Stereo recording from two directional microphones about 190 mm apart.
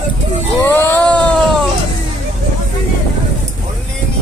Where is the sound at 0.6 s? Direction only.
10° left (ahead or behind).